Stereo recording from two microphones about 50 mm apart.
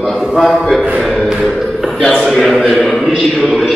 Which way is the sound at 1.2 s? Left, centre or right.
Centre.